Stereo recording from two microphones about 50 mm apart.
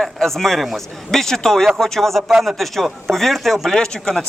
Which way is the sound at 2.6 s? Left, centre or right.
Centre.